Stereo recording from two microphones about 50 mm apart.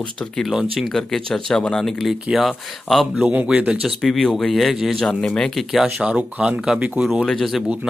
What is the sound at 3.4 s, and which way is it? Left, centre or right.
Speech, right.